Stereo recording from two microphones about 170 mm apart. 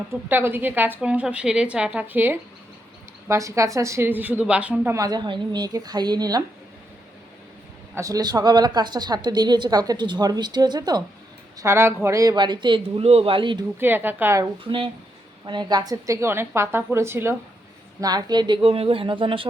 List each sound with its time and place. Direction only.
0.3 s a woman's voice: 10° right (ahead or behind)
4.9 s a woman's voice: 20° right (ahead or behind)
7.9 s a woman's voice: 20° right (ahead or behind)
13.7 s a woman's voice: 10° right (ahead or behind)
15.4 s a woman's voice: 25° right (ahead or behind)